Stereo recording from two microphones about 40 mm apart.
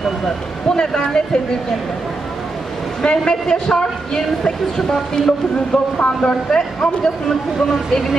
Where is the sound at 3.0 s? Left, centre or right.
Centre.